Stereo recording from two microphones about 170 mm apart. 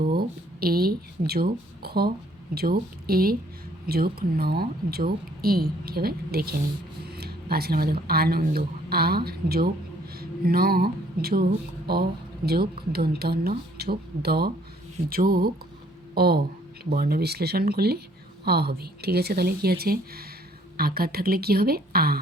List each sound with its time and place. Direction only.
0.1 s speech: 65° right (ahead or behind)
12.9 s speech: 65° right (ahead or behind)